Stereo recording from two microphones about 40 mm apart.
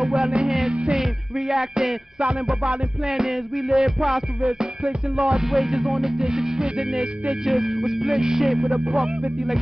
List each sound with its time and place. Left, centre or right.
0.0 s music: centre
2.1 s music: right
3.1 s music: centre
4.6 s music: right
5.4 s music: centre
7.4 s music: centre